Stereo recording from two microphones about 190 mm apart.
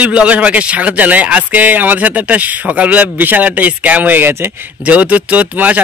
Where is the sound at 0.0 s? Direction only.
5° right (ahead or behind).